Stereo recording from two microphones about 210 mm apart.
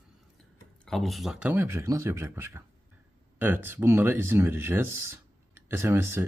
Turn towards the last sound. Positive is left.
turn(degrees=-10)  # may be behind; listen again after turning